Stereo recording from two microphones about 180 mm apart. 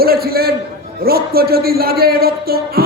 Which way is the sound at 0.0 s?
55° right (ahead or behind).